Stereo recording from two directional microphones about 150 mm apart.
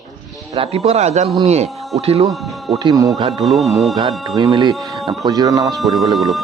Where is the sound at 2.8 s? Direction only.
25° right (ahead or behind).